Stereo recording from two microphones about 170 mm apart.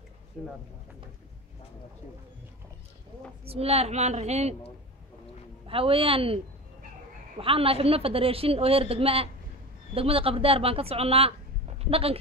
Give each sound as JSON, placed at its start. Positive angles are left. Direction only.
{"t": 0.4, "sound": "speech", "side_deg": 0}
{"t": 3.4, "sound": "a woman's voice", "side_deg": -35}
{"t": 5.7, "sound": "a woman's voice", "side_deg": -35}